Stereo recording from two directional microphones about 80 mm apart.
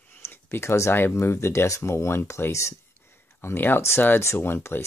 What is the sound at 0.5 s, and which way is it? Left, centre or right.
Speech, left.